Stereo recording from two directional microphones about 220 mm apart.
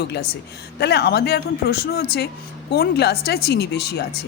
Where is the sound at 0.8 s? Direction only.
50° left (ahead or behind).